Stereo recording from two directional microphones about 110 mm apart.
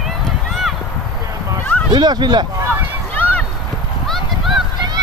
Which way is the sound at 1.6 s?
15° left (ahead or behind).